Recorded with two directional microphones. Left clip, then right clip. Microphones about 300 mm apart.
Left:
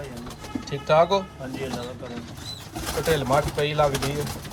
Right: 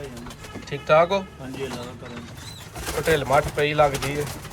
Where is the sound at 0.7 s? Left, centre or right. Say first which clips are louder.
Right 1 dB; centre.